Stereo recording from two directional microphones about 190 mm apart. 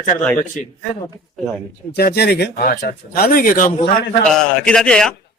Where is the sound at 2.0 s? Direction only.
55° left (ahead or behind).